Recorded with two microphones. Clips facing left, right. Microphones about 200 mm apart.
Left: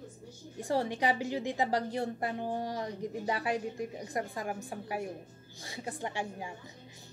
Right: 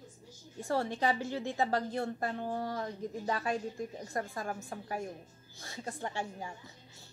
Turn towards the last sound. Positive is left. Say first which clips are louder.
# left 1 dB
turn(degrees=15)  # may be behind; listen again after turning